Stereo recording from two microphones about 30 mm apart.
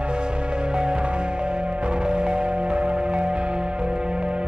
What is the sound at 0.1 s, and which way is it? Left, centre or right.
Music, right.